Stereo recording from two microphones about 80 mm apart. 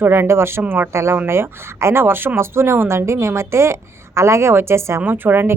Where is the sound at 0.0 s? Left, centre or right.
Right.